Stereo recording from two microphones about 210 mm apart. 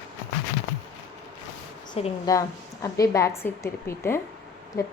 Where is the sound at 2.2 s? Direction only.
15° left (ahead or behind).